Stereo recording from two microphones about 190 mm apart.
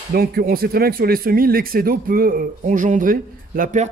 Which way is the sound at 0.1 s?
50° right (ahead or behind).